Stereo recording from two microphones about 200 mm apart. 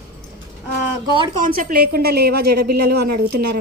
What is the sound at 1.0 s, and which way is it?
Speech, 25° right (ahead or behind).